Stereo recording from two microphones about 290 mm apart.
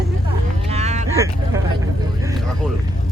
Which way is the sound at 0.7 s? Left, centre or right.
Right.